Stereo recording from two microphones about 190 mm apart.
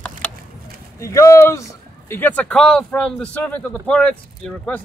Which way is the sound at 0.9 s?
15° left (ahead or behind).